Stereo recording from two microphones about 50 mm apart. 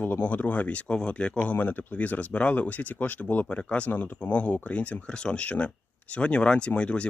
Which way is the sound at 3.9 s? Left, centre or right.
Left.